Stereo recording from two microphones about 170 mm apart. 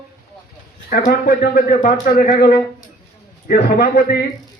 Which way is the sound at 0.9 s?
65° left (ahead or behind).